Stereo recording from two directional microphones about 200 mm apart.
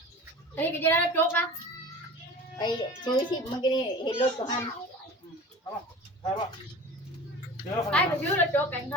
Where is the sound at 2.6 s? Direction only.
20° left (ahead or behind).